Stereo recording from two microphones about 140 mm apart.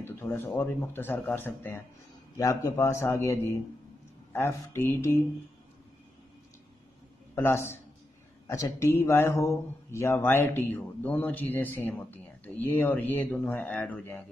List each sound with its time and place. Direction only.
0.0 s a man's voice: 15° left (ahead or behind)
7.3 s speech: 15° left (ahead or behind)